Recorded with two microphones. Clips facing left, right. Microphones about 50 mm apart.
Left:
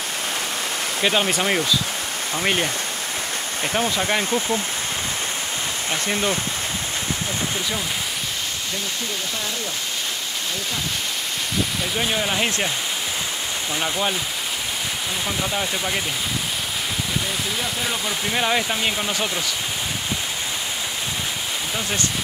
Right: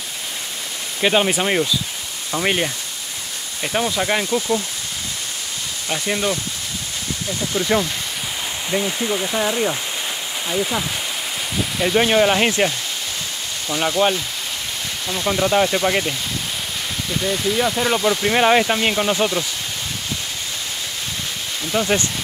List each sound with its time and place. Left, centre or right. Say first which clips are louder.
1.0 s speech: right 3 dB; centre
3.7 s speech: right 2 dB; centre
6.0 s speech: right 2 dB; centre
11.9 s speech: right 11 dB; right
13.8 s speech: right 7 dB; centre
15.2 s speech: right 10 dB; centre
17.9 s speech: right 7 dB; right
21.7 s speech: right 10 dB; right